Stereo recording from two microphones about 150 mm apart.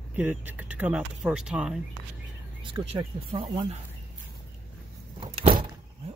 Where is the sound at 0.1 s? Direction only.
10° right (ahead or behind).